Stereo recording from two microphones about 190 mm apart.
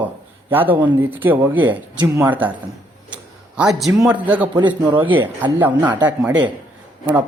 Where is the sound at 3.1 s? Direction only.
5° right (ahead or behind).